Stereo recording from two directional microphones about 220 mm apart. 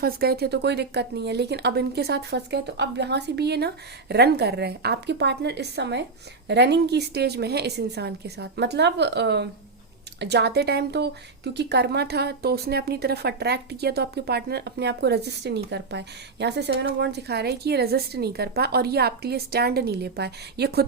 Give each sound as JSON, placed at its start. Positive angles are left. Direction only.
{"t": 0.0, "sound": "speech", "side_deg": -45}